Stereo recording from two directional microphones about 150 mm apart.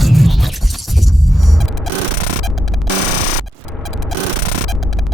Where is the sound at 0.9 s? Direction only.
Centre (ahead or behind).